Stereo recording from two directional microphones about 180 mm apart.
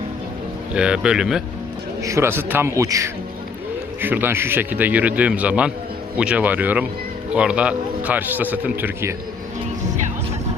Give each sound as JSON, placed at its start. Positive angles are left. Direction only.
{"t": 0.7, "sound": "speech", "side_deg": -5}
{"t": 2.0, "sound": "a man's voice", "side_deg": -15}